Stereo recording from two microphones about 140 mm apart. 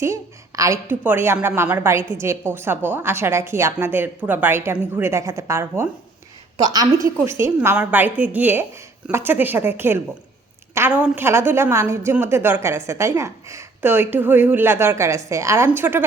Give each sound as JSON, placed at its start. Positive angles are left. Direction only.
{"t": 0.0, "sound": "a woman's voice", "side_deg": -20}